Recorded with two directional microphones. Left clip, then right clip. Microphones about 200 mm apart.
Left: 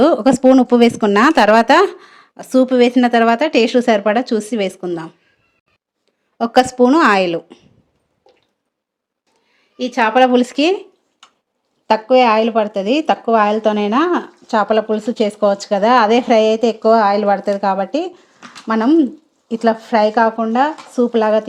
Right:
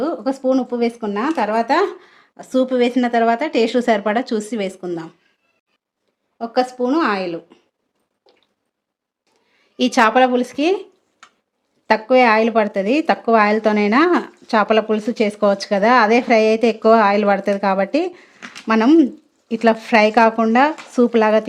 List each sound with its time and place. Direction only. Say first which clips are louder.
0.0 s speech: left 9 dB; 35° left (ahead or behind); by 5.1 s 10° left (ahead or behind)
6.3 s a woman's voice: left 6 dB; 35° left (ahead or behind)
9.7 s a woman's voice: right 2 dB; 20° right (ahead or behind)
10.3 s speech: left 4 dB; 20° left (ahead or behind)
11.9 s a woman's voice: left 2 dB; centre (ahead or behind)